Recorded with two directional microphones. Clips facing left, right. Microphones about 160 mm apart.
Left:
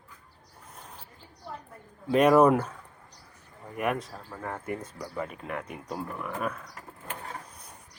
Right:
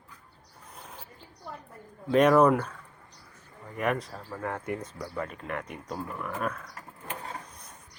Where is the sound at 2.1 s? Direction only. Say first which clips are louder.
Left 1 dB; 10° left (ahead or behind).